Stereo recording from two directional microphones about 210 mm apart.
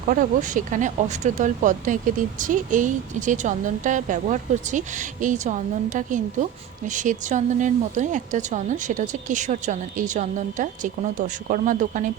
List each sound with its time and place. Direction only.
0.1 s speech: 40° right (ahead or behind)